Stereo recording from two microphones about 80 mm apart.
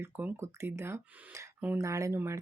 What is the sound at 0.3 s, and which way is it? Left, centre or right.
Speech, right.